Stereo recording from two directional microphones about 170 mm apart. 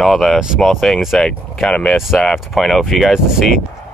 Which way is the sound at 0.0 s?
Centre (ahead or behind).